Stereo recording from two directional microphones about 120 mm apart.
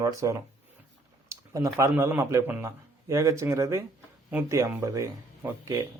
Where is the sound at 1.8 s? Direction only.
20° right (ahead or behind).